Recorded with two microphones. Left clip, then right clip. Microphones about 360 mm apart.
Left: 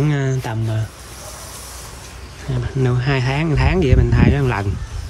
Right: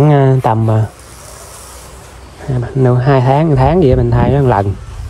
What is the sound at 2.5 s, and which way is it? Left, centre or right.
Speech, centre.